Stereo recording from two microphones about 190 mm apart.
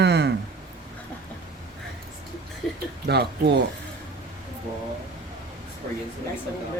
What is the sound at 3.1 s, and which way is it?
Speech, 60° right (ahead or behind).